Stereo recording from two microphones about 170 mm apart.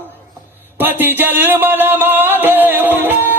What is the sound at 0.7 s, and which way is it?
Music, 10° right (ahead or behind).